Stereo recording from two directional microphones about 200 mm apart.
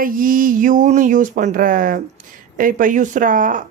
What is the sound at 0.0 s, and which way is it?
Speech, 45° right (ahead or behind).